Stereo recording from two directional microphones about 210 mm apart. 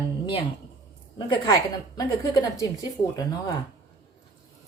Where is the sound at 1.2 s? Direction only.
20° left (ahead or behind).